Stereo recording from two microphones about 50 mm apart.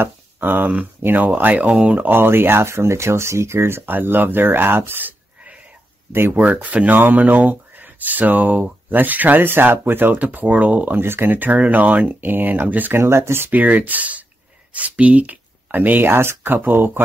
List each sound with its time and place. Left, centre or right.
0.0 s speech: right
2.0 s speech: right
3.9 s speech: right
6.1 s speech: right
6.4 s speech: right
11.0 s speech: right
12.9 s speech: right
13.5 s speech: right
15.7 s speech: right
16.5 s speech: right